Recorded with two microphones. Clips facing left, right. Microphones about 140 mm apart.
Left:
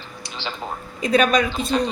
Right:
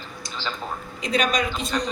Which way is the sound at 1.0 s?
55° left (ahead or behind).